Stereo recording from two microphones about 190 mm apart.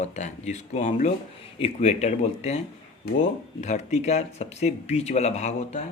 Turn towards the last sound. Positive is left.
turn(degrees=35)  # may be behind; listen again after turning